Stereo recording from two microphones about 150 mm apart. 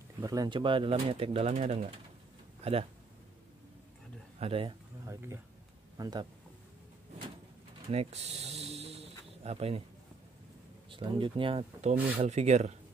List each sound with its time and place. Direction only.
0.2 s speech: 25° right (ahead or behind); by 2.9 s 40° right (ahead or behind)
4.4 s speech: 40° right (ahead or behind)
5.0 s speech: 20° right (ahead or behind)
7.9 s a sound: 45° right (ahead or behind)
10.9 s speech: 35° right (ahead or behind)
12.2 s speech: 50° right (ahead or behind)